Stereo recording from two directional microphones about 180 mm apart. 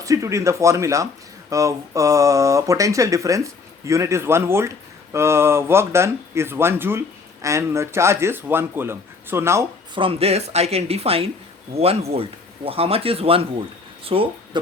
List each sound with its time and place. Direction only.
0.0 s speech: 20° right (ahead or behind)
9.9 s speech: 30° right (ahead or behind)